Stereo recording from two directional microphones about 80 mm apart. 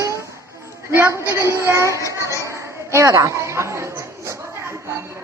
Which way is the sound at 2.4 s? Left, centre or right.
Right.